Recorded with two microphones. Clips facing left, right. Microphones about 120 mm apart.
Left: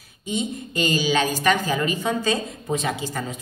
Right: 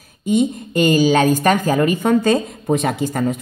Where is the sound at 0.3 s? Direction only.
55° right (ahead or behind).